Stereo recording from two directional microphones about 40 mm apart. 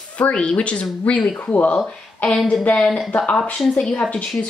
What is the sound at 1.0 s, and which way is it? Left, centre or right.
Speech, left.